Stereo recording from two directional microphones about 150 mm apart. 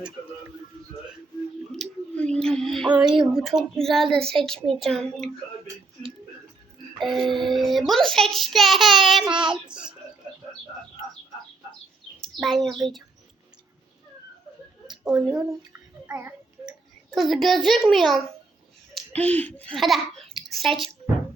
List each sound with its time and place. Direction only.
1.7 s a sound: 5° left (ahead or behind)
2.9 s a woman's voice: 5° right (ahead or behind)
7.0 s a woman's voice: centre (ahead or behind)
12.2 s a child's voice: centre (ahead or behind)
15.0 s a woman's voice: 5° right (ahead or behind)
15.7 s babbling: 15° right (ahead or behind)
17.1 s a woman's voice: centre (ahead or behind)